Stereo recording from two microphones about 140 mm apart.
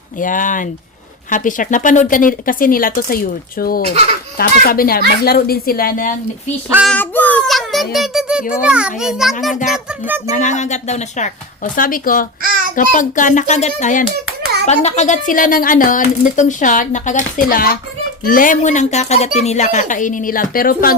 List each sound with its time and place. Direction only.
0.2 s speech: 70° left (ahead or behind)
6.9 s a child's voice: 15° left (ahead or behind)
7.4 s a sound: centre (ahead or behind)
8.6 s a child's voice: 5° right (ahead or behind)
9.5 s speech: 65° left (ahead or behind); by 12.3 s 80° left
12.7 s speech: 65° left (ahead or behind); by 17.7 s 90° left
18.3 s speech: 75° left (ahead or behind)